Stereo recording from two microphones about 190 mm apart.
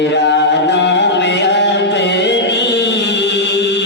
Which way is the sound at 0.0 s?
65° left (ahead or behind).